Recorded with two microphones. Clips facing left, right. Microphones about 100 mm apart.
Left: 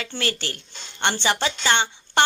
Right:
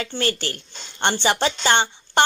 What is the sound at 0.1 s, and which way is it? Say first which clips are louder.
Speech: right 2 dB; 30° right (ahead or behind).